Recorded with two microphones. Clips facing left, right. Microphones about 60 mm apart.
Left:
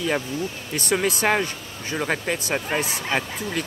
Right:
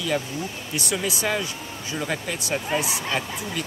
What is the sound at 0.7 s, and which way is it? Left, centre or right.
Speech, left.